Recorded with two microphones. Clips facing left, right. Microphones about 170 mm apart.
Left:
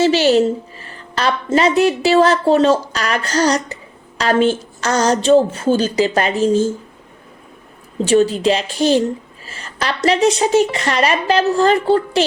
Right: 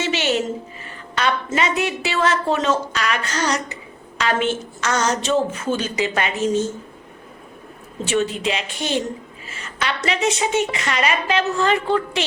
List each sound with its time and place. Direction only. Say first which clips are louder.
0.0 s a woman's voice: left 9 dB; 35° left (ahead or behind)
8.0 s a woman's voice: left 8 dB; 35° left (ahead or behind)